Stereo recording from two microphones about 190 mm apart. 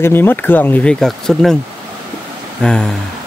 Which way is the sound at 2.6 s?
5° left (ahead or behind).